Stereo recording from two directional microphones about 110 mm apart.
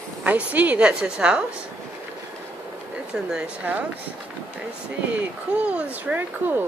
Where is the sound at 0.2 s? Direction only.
15° right (ahead or behind).